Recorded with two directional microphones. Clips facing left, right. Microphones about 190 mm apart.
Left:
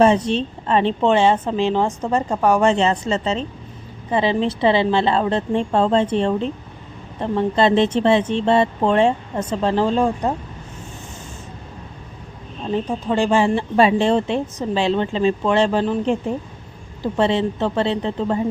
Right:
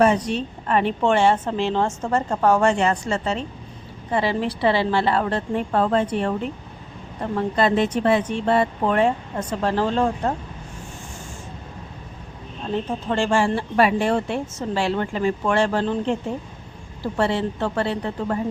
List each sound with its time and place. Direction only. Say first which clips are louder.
0.0 s speech: left 3 dB; 25° left (ahead or behind)
12.7 s speech: left 3 dB; 15° left (ahead or behind)